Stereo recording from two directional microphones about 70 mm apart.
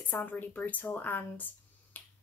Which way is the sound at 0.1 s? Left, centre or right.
Left.